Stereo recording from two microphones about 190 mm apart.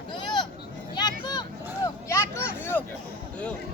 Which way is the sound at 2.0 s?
15° left (ahead or behind).